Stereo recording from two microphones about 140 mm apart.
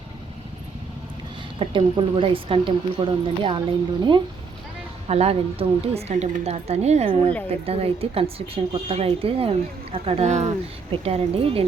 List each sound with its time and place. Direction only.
1.5 s a woman's voice: 40° right (ahead or behind)
5.0 s speech: 45° right (ahead or behind)
10.9 s speech: 45° right (ahead or behind)